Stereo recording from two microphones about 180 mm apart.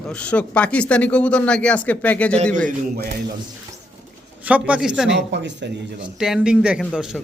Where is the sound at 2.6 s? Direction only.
55° right (ahead or behind).